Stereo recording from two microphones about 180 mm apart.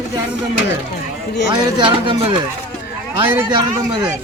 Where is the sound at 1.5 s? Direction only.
25° right (ahead or behind).